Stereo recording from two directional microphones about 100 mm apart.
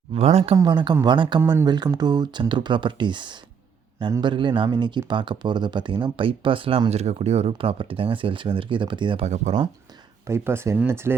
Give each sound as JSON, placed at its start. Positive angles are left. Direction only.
{"t": 0.1, "sound": "speech", "side_deg": -90}
{"t": 0.5, "sound": "speech", "side_deg": -45}
{"t": 10.2, "sound": "speech", "side_deg": -25}